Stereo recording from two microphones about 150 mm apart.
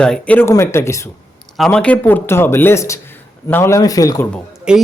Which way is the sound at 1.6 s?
5° left (ahead or behind).